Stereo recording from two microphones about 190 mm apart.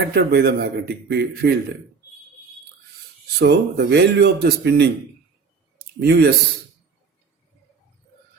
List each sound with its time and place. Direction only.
0.0 s a man's voice: 60° right (ahead or behind)
3.3 s a man's voice: 60° right (ahead or behind)